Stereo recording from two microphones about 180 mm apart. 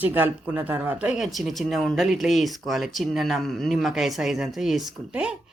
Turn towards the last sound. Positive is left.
turn(degrees=-5)  # may be behind; listen again after turning